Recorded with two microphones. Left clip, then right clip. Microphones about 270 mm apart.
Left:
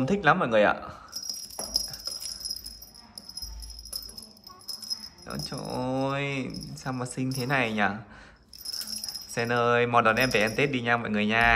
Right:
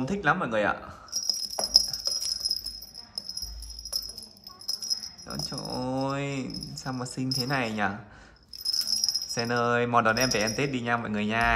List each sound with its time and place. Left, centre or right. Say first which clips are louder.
0.0 s cricket: left 3 dB; centre
3.2 s music: right 4 dB; centre
4.6 s rattle: right 5 dB; centre
5.3 s speech: even; centre
8.6 s a sound: right 8 dB; centre
9.3 s speech: left 5 dB; centre